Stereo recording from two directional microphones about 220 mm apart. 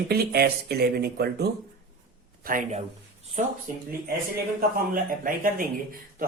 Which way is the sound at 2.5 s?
35° right (ahead or behind).